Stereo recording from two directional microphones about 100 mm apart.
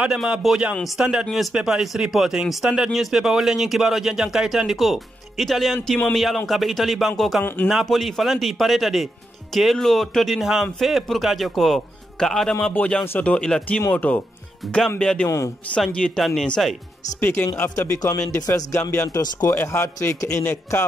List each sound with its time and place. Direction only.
0.0 s a man's voice: 10° right (ahead or behind); by 14.2 s 15° left (ahead or behind)
14.6 s speech: centre (ahead or behind)
15.0 s speech: 10° left (ahead or behind)
15.2 s speech: 30° left (ahead or behind)
15.7 s speech: 10° left (ahead or behind)
17.2 s a man's voice: 25° left (ahead or behind)
17.6 s a man's voice: 35° left (ahead or behind)